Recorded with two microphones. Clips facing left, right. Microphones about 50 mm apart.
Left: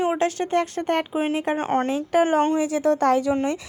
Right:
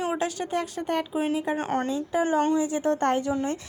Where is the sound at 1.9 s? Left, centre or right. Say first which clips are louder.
Left 6 dB; left.